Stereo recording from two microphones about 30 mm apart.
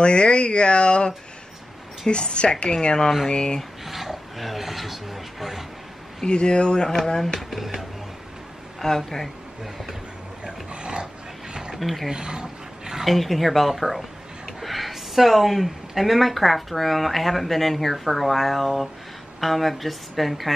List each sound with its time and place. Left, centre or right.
0.0 s speech: left
3.8 s speech: centre
6.2 s speech: left
7.3 s speech: centre
8.8 s speech: centre
10.7 s dog: right
11.7 s speech: centre
12.1 s speech: right
13.0 s speech: centre